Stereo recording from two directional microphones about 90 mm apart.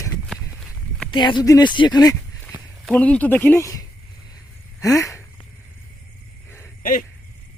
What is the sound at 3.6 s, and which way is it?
Speech, 40° left (ahead or behind).